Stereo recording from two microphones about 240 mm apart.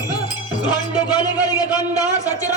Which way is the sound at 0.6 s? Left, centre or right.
Centre.